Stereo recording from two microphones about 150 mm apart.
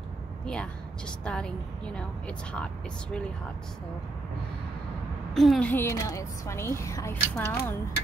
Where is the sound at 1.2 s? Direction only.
5° left (ahead or behind).